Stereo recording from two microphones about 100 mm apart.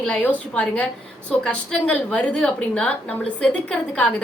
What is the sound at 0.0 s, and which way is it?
A woman's voice, 10° left (ahead or behind).